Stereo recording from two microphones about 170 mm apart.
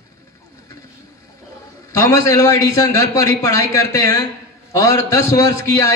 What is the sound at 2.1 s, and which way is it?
A man's voice, 20° left (ahead or behind).